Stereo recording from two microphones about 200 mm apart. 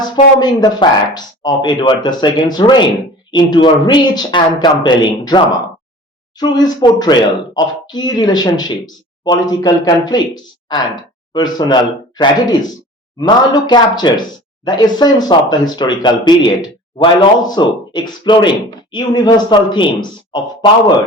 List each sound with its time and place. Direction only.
0.0 s speech: 20° left (ahead or behind)